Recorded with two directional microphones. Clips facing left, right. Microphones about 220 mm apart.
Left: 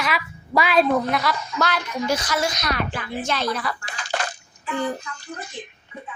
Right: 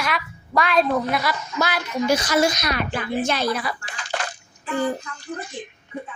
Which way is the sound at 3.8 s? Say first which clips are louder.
Left 1 dB; 40° left (ahead or behind).